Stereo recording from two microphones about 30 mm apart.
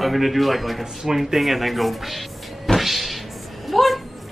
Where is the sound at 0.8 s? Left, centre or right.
Centre.